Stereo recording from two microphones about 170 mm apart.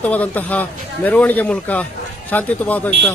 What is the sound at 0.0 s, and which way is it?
Speech, 10° left (ahead or behind).